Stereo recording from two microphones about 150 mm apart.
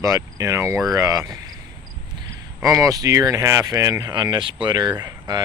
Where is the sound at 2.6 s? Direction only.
20° right (ahead or behind).